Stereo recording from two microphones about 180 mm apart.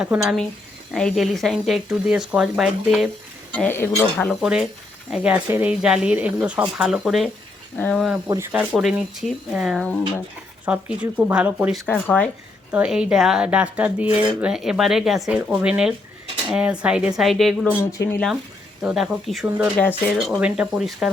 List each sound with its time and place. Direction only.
0.0 s speech: 5° right (ahead or behind)
3.5 s speech: 10° left (ahead or behind)
4.4 s speech: 5° right (ahead or behind)
11.9 s speech: 10° left (ahead or behind)
12.7 s speech: 5° right (ahead or behind)
17.7 s speech: 15° left (ahead or behind)
18.8 s speech: 5° right (ahead or behind)
19.8 s speech: 5° left (ahead or behind)